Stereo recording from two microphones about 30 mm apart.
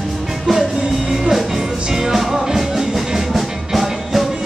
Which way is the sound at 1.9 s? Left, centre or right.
Centre.